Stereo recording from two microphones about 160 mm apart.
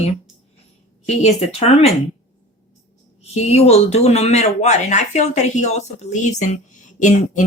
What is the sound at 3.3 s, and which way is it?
Speech, 40° left (ahead or behind).